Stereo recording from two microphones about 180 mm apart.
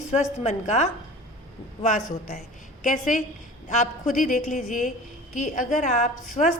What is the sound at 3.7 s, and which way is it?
A woman's voice, 45° left (ahead or behind).